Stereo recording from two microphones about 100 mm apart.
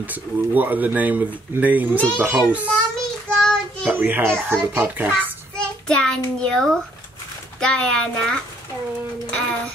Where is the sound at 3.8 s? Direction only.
20° right (ahead or behind).